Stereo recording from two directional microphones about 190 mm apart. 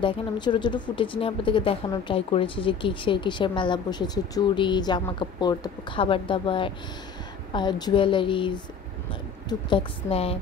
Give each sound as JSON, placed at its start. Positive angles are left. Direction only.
{"t": 0.0, "sound": "speech", "side_deg": 25}